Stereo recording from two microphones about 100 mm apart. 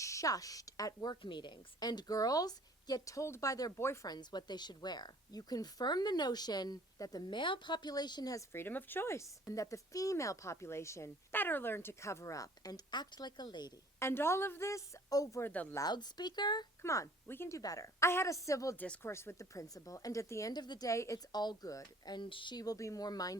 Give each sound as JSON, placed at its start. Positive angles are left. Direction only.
{"t": 0.0, "sound": "a woman's voice", "side_deg": 30}
{"t": 4.0, "sound": "a woman's voice", "side_deg": 45}
{"t": 8.5, "sound": "speech", "side_deg": 20}
{"t": 14.0, "sound": "speech", "side_deg": 25}
{"t": 15.4, "sound": "speech", "side_deg": 15}
{"t": 15.9, "sound": "a woman's voice", "side_deg": 45}
{"t": 16.8, "sound": "speech", "side_deg": 30}
{"t": 17.6, "sound": "a woman's voice", "side_deg": 35}
{"t": 20.5, "sound": "a woman's voice", "side_deg": 45}